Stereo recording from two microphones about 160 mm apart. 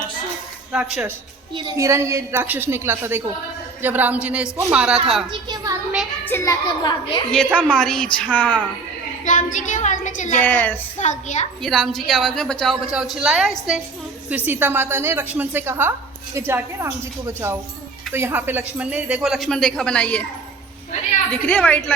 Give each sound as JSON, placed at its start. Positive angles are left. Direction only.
{"t": 0.7, "sound": "a woman's voice", "side_deg": -5}
{"t": 1.5, "sound": "a woman's voice", "side_deg": -25}
{"t": 5.3, "sound": "a sound", "side_deg": -25}
{"t": 6.2, "sound": "a child's voice", "side_deg": 15}
{"t": 7.3, "sound": "a woman's voice", "side_deg": 5}
{"t": 9.2, "sound": "a woman's voice", "side_deg": 50}
{"t": 10.4, "sound": "a woman's voice", "side_deg": 10}
{"t": 11.0, "sound": "a woman's voice", "side_deg": 50}
{"t": 11.6, "sound": "a woman's voice", "side_deg": 5}
{"t": 21.4, "sound": "a woman's voice", "side_deg": 10}